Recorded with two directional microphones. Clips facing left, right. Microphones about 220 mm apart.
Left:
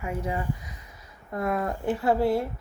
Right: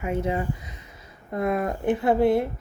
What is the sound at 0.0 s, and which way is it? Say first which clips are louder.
Speech: right 5 dB; 25° right (ahead or behind).